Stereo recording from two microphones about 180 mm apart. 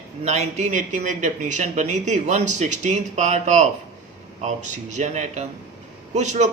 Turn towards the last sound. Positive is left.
turn(degrees=-40)  # may be behind; listen again after turning